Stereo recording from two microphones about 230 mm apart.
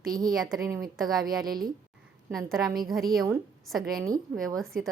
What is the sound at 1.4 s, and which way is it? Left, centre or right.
Speech, right.